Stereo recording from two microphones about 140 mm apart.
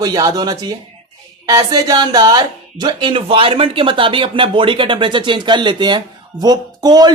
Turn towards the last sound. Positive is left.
turn(degrees=-30)  # may be behind; listen again after turning